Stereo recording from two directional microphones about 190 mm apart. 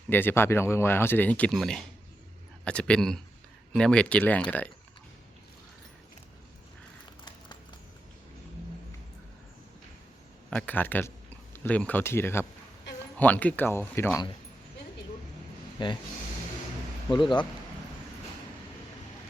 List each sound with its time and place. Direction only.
0.1 s speech: 10° left (ahead or behind)
7.0 s a sound: 25° left (ahead or behind)
10.5 s speech: 10° left (ahead or behind)
15.8 s speech: 25° left (ahead or behind)
17.1 s speech: 25° left (ahead or behind)